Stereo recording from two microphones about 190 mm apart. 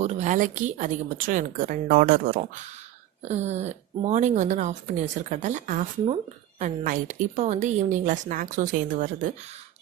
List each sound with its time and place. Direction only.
0.0 s a woman's voice: 35° right (ahead or behind)
3.2 s a woman's voice: 35° right (ahead or behind)